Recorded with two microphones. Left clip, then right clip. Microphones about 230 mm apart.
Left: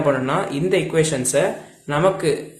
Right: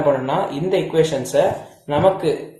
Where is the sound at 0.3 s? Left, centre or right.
Left.